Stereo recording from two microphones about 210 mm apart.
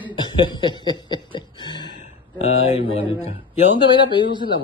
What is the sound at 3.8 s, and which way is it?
Speech, 20° left (ahead or behind).